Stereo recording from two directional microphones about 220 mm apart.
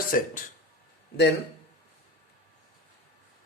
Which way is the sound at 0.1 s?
40° left (ahead or behind).